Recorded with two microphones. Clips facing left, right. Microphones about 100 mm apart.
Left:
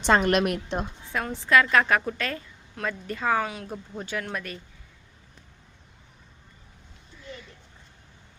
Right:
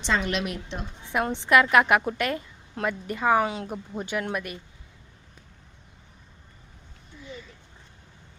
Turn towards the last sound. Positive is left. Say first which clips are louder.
# right 1 dB
turn(degrees=-5)  # may be behind; listen again after turning